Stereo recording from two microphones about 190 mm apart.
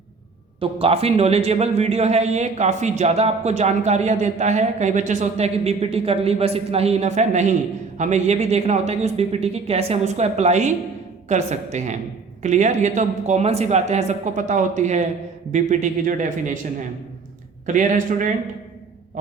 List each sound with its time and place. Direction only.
0.6 s a man's voice: 30° right (ahead or behind)
17.7 s a man's voice: 45° right (ahead or behind)